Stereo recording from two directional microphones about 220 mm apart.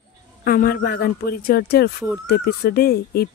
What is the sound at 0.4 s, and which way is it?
Speech, 40° left (ahead or behind).